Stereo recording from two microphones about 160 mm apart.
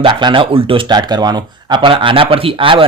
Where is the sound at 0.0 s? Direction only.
30° right (ahead or behind).